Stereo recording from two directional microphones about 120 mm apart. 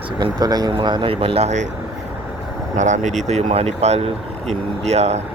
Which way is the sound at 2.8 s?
90° right.